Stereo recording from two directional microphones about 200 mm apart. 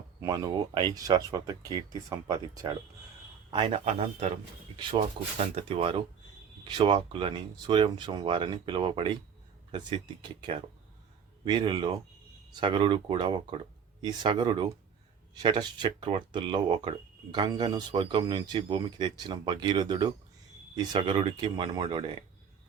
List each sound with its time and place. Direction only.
0.2 s speech: 15° right (ahead or behind)